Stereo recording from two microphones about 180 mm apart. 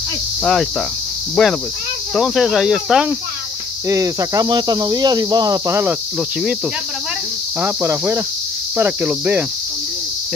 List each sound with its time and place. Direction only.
0.4 s speech: centre (ahead or behind)
3.9 s speech: 20° right (ahead or behind)
7.6 s cricket: 10° right (ahead or behind)